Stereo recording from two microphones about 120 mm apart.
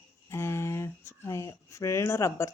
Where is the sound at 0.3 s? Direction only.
20° left (ahead or behind).